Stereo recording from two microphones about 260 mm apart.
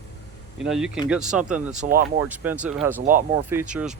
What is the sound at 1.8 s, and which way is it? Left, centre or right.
Speech, right.